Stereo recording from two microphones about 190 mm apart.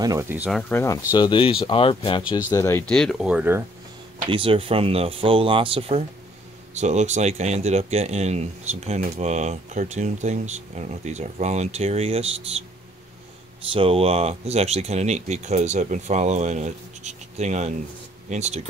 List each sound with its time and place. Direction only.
0.0 s speech: 15° right (ahead or behind)
0.5 s speech: centre (ahead or behind)
0.7 s speech: 15° left (ahead or behind)
2.9 s speech: centre (ahead or behind)
4.3 s speech: 30° right (ahead or behind)
13.7 s speech: 30° right (ahead or behind)